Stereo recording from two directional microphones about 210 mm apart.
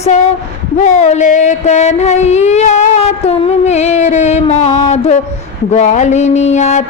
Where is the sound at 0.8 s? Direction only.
35° left (ahead or behind).